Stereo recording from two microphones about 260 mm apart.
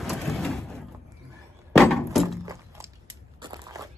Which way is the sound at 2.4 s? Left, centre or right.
Centre.